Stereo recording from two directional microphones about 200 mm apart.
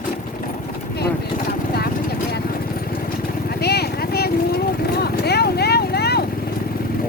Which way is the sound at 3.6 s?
55° left (ahead or behind).